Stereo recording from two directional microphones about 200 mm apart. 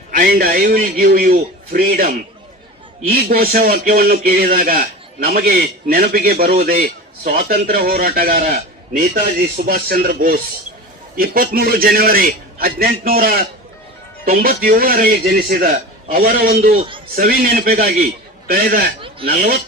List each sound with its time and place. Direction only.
0.1 s speech: 45° right (ahead or behind)